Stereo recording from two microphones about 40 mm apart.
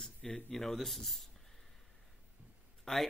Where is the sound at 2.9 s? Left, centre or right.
Centre.